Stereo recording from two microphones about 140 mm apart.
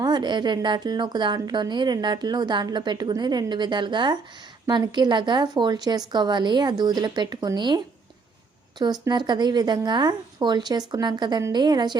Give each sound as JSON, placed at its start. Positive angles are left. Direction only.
{"t": 0.0, "sound": "a woman's voice", "side_deg": -30}
{"t": 8.8, "sound": "a woman's voice", "side_deg": -30}